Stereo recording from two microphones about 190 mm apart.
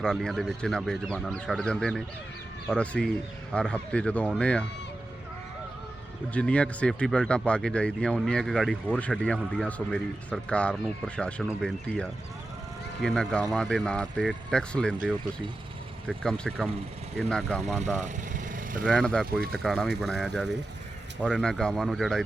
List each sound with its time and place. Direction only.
0.0 s speech: 5° left (ahead or behind)
6.3 s speech: 5° left (ahead or behind)
16.0 s speech: 5° left (ahead or behind)
18.0 s vehicle: 45° right (ahead or behind)
18.9 s speech: 5° left (ahead or behind)